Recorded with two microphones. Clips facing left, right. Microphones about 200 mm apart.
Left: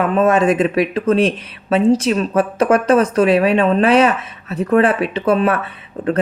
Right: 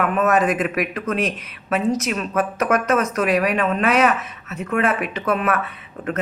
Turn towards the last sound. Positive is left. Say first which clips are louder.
# left 7 dB
turn(degrees=35)  # may be behind; listen again after turning